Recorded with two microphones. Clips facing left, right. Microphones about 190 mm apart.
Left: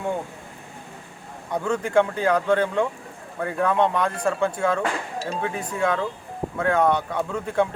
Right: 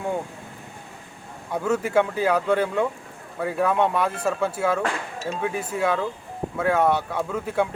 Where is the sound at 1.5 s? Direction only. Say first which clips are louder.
Left 1 dB; 5° right (ahead or behind).